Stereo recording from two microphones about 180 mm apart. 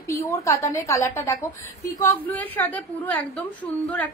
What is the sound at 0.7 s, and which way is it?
A woman's voice, 15° left (ahead or behind).